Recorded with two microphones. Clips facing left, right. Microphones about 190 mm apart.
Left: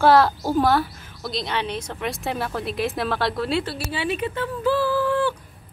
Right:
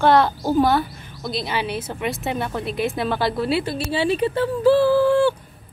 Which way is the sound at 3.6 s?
25° right (ahead or behind).